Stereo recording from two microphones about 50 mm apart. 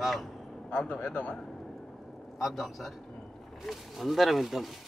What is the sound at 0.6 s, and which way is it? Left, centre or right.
Speech, centre.